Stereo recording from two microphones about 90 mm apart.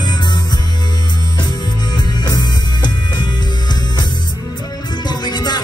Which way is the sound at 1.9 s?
55° left (ahead or behind).